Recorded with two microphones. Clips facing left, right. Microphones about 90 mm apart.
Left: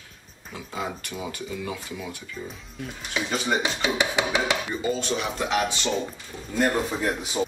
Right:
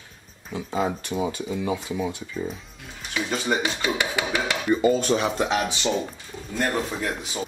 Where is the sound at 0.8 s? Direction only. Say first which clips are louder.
Right 7 dB; 25° right (ahead or behind).